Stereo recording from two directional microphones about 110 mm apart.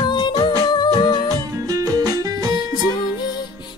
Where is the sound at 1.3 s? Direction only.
35° right (ahead or behind).